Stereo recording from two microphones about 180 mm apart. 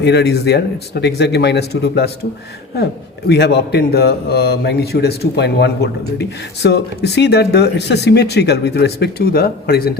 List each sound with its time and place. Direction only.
0.0 s speech: 70° left (ahead or behind)
3.2 s a man's voice: 65° left (ahead or behind)